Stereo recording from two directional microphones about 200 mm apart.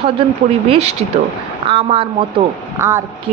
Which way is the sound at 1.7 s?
25° right (ahead or behind).